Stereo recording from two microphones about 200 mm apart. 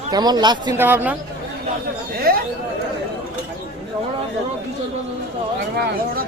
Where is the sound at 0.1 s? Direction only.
20° right (ahead or behind).